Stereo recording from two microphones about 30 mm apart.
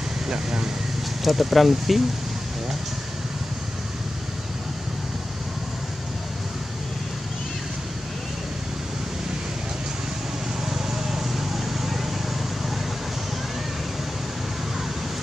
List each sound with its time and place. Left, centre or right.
0.3 s speech: right
1.2 s speech: centre
10.7 s vehicle: centre